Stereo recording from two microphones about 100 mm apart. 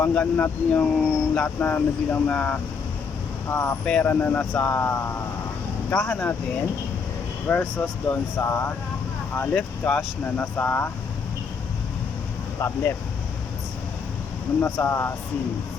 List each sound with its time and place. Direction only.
0.0 s speech: 15° left (ahead or behind)
7.4 s speech: 15° left (ahead or behind)
12.5 s speech: 25° left (ahead or behind)
14.6 s speech: 25° left (ahead or behind)